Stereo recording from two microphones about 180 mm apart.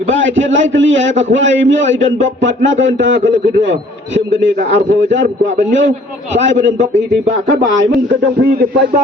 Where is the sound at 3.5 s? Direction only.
80° right.